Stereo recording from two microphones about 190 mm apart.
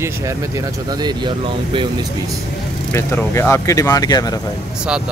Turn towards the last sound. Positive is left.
turn(degrees=20)  # may be behind; listen again after turning